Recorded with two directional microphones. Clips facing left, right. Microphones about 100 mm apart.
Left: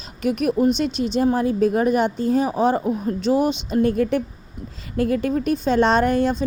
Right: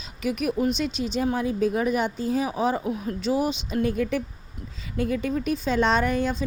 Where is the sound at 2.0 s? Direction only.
60° left (ahead or behind).